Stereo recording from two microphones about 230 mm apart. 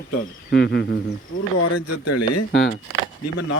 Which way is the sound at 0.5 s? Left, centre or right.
Left.